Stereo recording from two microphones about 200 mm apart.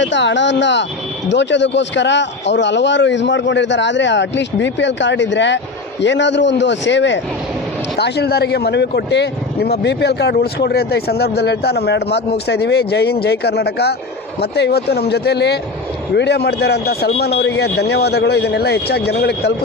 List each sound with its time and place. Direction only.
0.0 s speech: 65° left (ahead or behind)